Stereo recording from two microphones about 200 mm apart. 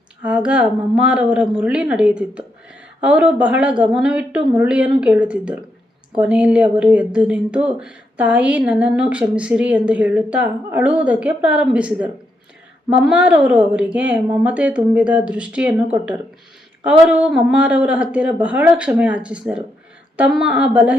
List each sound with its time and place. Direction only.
0.2 s a woman's voice: 5° right (ahead or behind)